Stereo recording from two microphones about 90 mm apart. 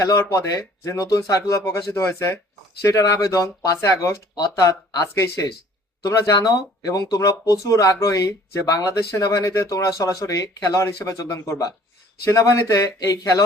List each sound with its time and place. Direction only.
0.0 s speech: 40° left (ahead or behind)